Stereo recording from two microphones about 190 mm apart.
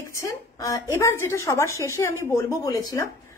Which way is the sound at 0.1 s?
15° left (ahead or behind).